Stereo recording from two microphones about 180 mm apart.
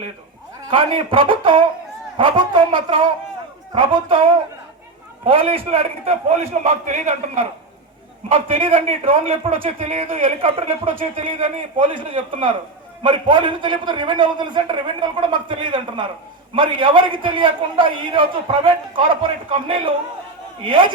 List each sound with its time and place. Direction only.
0.7 s a man's voice: 30° right (ahead or behind)